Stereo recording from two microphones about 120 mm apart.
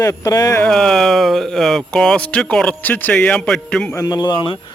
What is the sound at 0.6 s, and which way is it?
A man's voice, 5° left (ahead or behind).